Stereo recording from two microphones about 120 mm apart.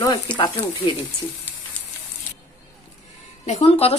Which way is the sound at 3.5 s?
55° left (ahead or behind).